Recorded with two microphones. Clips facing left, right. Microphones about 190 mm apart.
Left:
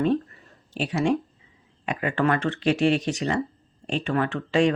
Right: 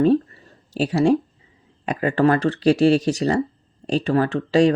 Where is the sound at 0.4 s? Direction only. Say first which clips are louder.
Right 6 dB; 40° right (ahead or behind).